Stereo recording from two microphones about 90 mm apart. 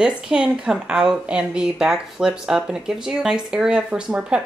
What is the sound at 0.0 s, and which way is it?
Speech, 5° right (ahead or behind).